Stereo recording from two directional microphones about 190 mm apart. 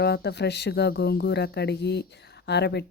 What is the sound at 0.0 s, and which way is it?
Speech, 60° left (ahead or behind).